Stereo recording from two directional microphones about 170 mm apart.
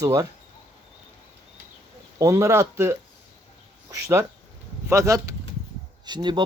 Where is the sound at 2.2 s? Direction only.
15° right (ahead or behind).